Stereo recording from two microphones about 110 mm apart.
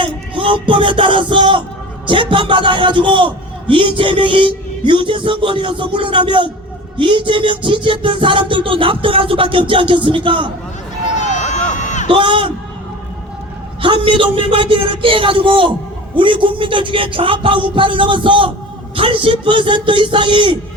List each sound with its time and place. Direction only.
0.0 s music: 50° right (ahead or behind)
2.0 s a man's voice: 50° right (ahead or behind)
11.2 s a sound: 90° left
12.0 s a man's voice: 50° right (ahead or behind)
13.8 s a man's voice: 50° right (ahead or behind)